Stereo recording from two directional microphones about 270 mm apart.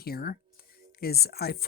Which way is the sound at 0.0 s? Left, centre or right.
Left.